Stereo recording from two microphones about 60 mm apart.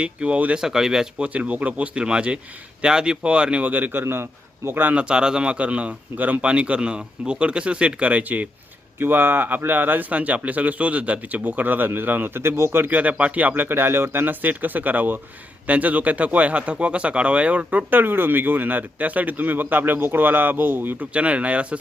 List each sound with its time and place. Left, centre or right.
0.0 s speech: centre
0.6 s speech: centre
1.2 s speech: right
3.7 s speech: right
4.0 s a man's voice: right
4.9 s speech: centre
9.0 s speech: right
12.9 s speech: right
13.7 s speech: right
21.1 s speech: right